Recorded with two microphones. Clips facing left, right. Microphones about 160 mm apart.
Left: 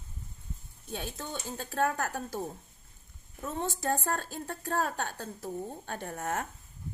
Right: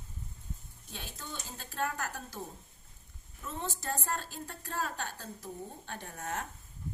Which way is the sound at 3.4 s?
50° left (ahead or behind).